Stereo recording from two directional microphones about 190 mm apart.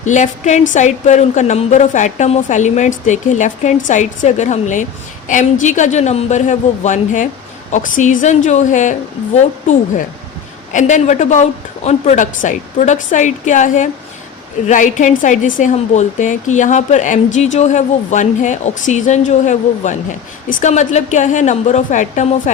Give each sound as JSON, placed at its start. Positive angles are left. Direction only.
{"t": 0.0, "sound": "a woman's voice", "side_deg": 40}